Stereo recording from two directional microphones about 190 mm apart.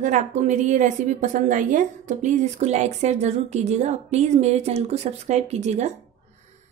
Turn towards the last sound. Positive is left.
turn(degrees=-35)  # may be behind; listen again after turning